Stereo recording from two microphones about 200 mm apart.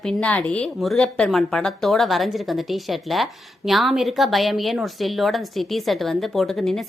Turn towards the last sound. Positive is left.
turn(degrees=0)  # may be behind; listen again after turning